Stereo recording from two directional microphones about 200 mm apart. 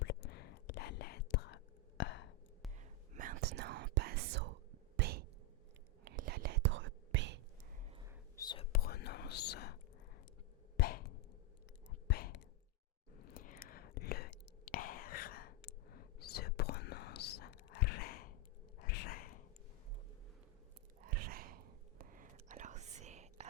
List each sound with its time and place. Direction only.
0.0 s whispering: 60° left (ahead or behind)
2.7 s whispering: 35° right (ahead or behind); by 4.5 s 55° right (ahead or behind)
4.9 s a sound: 55° right (ahead or behind)
6.1 s whispering: 50° right (ahead or behind); by 7.3 s 70° right (ahead or behind)
8.4 s whispering: 20° left (ahead or behind)
8.7 s whispering: 50° left (ahead or behind)
10.8 s a sound: 50° left (ahead or behind)
12.0 s whispering: 55° left (ahead or behind)
18.8 s a sound: 50° left (ahead or behind)
21.0 s whispering: 45° right (ahead or behind)